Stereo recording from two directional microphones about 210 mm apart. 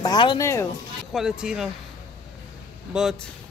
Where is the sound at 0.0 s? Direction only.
20° left (ahead or behind).